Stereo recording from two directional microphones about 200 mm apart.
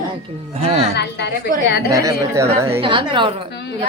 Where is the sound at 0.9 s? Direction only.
55° left (ahead or behind).